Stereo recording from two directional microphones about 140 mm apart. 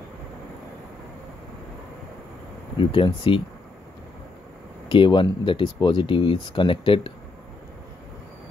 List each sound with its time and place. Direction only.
2.8 s speech: 40° left (ahead or behind)
4.8 s speech: 35° left (ahead or behind)